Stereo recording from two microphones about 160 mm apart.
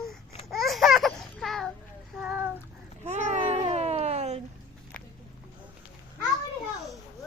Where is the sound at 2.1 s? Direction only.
5° right (ahead or behind).